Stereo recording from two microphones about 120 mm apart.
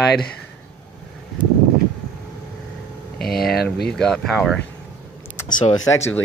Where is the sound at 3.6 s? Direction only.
5° left (ahead or behind).